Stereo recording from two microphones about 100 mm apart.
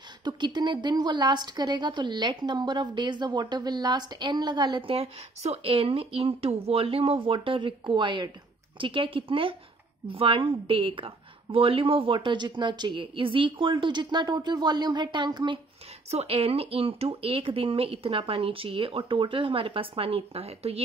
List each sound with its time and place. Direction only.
0.2 s a woman's voice: 50° right (ahead or behind)
16.1 s speech: 85° right